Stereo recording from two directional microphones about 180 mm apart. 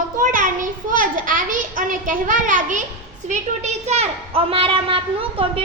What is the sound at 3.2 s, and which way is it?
A woman's voice, 40° right (ahead or behind).